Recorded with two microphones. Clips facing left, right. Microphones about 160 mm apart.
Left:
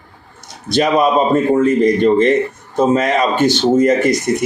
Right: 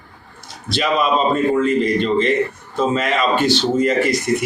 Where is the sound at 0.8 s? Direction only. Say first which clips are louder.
Left 5 dB; 45° left (ahead or behind).